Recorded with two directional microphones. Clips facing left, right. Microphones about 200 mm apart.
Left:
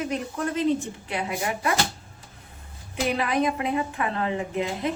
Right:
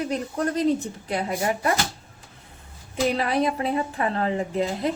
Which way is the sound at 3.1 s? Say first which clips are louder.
Right 1 dB; 35° right (ahead or behind).